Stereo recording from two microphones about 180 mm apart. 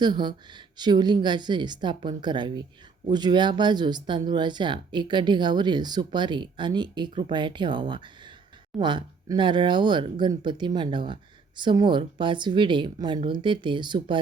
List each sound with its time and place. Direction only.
0.0 s speech: 25° right (ahead or behind)